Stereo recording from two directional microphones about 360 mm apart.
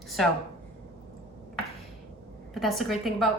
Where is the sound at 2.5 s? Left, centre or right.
Centre.